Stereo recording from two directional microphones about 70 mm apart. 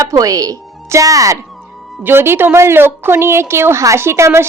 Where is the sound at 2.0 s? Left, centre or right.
Right.